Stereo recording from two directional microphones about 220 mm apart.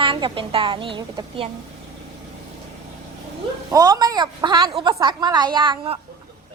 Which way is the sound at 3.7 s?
15° right (ahead or behind).